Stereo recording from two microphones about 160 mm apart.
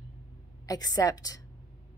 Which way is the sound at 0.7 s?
25° left (ahead or behind).